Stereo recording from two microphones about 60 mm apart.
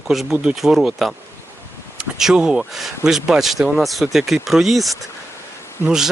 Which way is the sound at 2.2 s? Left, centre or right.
Centre.